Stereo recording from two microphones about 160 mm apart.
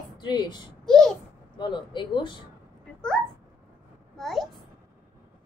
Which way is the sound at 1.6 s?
30° left (ahead or behind).